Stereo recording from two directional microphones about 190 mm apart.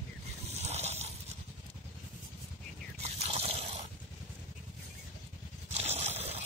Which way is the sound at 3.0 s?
35° right (ahead or behind).